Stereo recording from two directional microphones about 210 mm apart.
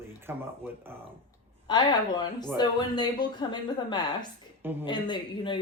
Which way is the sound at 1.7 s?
20° left (ahead or behind).